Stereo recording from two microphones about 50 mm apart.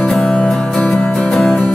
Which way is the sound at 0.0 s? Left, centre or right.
Centre.